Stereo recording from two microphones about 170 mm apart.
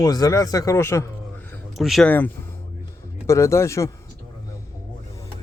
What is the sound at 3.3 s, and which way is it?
Speech, 15° left (ahead or behind).